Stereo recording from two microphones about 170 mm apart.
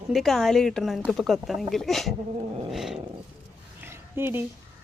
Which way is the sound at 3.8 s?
15° right (ahead or behind).